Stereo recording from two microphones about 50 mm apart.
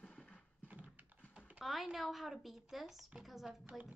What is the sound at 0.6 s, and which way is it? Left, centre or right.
Horse, right.